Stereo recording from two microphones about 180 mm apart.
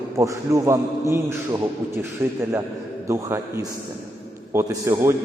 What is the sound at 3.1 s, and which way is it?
Speech, 15° right (ahead or behind).